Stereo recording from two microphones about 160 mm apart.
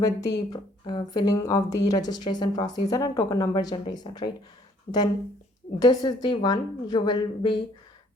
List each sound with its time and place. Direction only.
0.0 s speech: 25° left (ahead or behind)
5.8 s speech: 25° left (ahead or behind)